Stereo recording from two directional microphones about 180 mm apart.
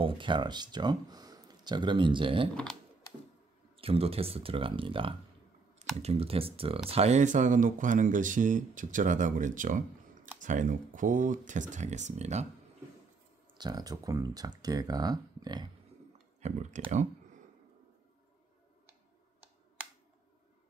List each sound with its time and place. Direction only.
0.0 s speech: 30° right (ahead or behind)
2.5 s speech: 5° left (ahead or behind)
3.7 s speech: 30° right (ahead or behind)
13.6 s speech: 20° right (ahead or behind)
16.3 s speech: 40° right (ahead or behind)